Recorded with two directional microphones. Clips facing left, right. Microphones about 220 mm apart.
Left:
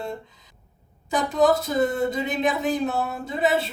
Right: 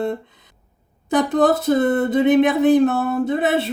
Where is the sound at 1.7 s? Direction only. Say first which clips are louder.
Right 6 dB; 55° right (ahead or behind).